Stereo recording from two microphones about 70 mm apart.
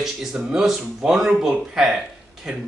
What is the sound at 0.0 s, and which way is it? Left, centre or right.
Speech, centre.